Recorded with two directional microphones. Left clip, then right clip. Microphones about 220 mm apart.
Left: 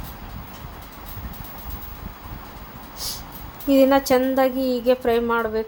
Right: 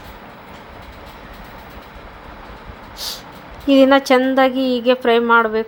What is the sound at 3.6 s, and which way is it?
Speech, 15° right (ahead or behind).